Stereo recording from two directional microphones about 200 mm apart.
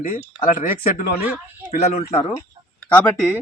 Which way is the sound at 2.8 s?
5° left (ahead or behind).